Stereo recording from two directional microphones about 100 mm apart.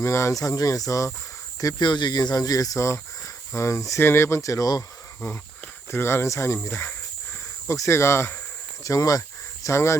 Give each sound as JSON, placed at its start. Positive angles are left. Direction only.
{"t": 0.0, "sound": "speech", "side_deg": 30}